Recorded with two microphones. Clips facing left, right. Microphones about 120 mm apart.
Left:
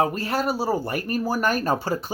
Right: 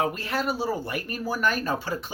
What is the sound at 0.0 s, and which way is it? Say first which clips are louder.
Speech: left 4 dB; 40° left (ahead or behind).